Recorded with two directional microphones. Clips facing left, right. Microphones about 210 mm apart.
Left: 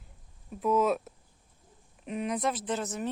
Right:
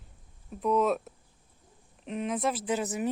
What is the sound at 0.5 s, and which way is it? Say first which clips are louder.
Speech: even; centre (ahead or behind).